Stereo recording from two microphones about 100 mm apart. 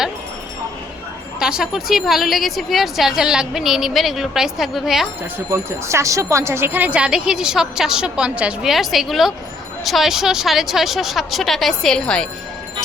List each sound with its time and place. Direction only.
1.4 s speech: 5° right (ahead or behind)
5.5 s speech: 30° right (ahead or behind); by 12.3 s 10° left (ahead or behind)